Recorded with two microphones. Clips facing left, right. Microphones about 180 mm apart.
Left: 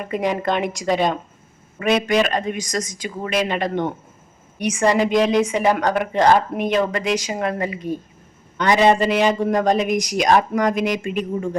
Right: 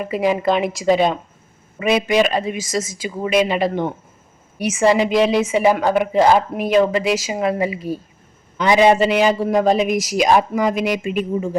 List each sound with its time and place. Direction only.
0.0 s a man's voice: 5° right (ahead or behind)